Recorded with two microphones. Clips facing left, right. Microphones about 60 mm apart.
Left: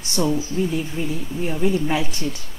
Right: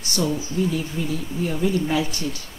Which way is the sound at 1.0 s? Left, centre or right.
Left.